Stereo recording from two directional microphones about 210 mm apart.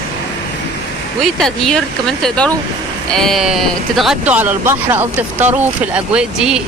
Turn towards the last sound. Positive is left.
turn(degrees=-5)  # may be behind; listen again after turning